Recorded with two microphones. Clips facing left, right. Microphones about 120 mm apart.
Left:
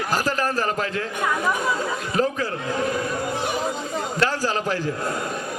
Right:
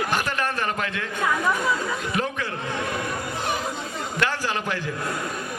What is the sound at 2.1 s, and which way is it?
Speech, 35° left (ahead or behind).